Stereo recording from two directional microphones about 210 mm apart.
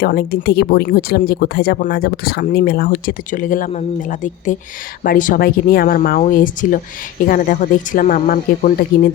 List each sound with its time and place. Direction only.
0.0 s speech: 50° left (ahead or behind)